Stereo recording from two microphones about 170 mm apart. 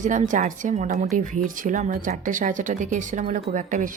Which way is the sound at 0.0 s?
45° right (ahead or behind).